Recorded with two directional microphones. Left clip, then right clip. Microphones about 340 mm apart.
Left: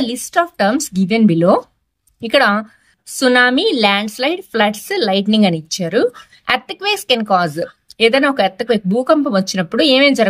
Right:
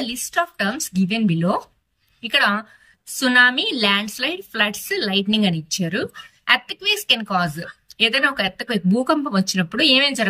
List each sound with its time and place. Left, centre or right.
0.1 s a woman's voice: centre